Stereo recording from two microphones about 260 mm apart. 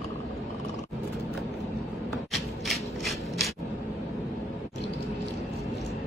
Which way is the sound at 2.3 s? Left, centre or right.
Centre.